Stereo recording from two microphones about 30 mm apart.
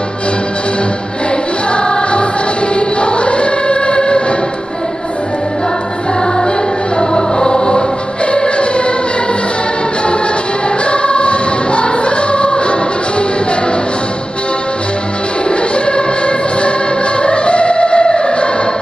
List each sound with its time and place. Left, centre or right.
1.7 s music: left
2.7 s choir: left
7.0 s music: left
8.3 s choir: left
10.9 s choir: left
15.7 s organ: left
17.2 s music: left